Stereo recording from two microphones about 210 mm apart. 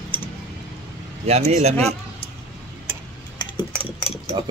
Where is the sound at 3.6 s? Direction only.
25° left (ahead or behind).